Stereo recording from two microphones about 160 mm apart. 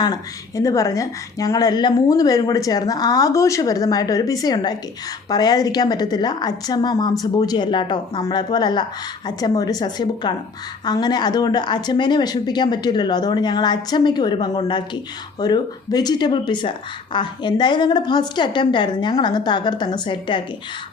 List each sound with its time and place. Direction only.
0.0 s a woman's voice: 20° left (ahead or behind)